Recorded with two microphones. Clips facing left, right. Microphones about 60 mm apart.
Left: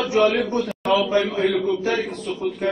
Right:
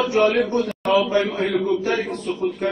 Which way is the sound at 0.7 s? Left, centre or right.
Centre.